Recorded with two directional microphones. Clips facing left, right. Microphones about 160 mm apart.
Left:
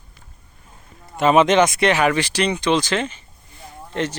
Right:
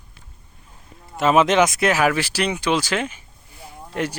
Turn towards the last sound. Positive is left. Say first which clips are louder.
# left 1 dB
turn(degrees=-10)  # may be behind; listen again after turning